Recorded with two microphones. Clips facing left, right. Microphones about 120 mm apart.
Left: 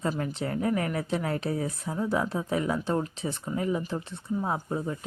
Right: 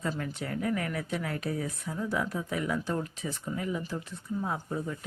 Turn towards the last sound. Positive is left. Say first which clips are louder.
# left 3 dB
turn(degrees=30)  # may be behind; listen again after turning